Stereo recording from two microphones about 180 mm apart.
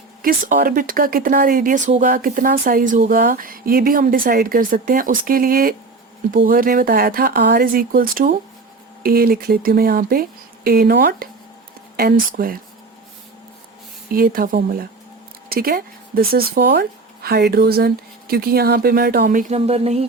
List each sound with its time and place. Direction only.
0.2 s speech: 50° right (ahead or behind)
14.1 s speech: 55° right (ahead or behind); by 20.1 s 35° right (ahead or behind)